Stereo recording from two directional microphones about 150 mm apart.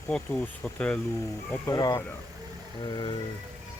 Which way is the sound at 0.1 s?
10° left (ahead or behind).